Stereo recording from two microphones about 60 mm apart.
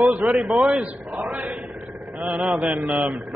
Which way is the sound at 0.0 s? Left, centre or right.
Centre.